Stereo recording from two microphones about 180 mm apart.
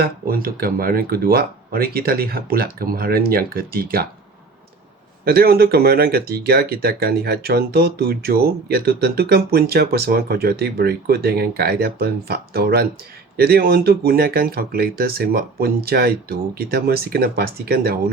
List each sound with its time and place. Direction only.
0.0 s speech: 55° right (ahead or behind)
5.2 s speech: 60° right (ahead or behind)